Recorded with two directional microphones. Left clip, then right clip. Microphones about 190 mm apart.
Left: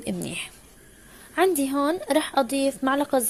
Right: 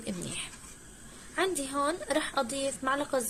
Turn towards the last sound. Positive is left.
turn(degrees=35)  # may be behind; listen again after turning